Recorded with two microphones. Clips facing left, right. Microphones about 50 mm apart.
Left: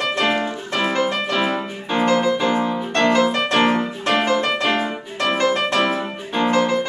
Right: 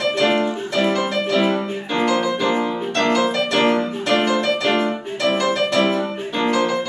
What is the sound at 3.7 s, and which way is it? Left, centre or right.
Music, centre.